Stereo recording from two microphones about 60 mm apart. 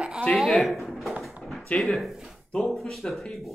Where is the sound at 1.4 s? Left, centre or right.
Centre.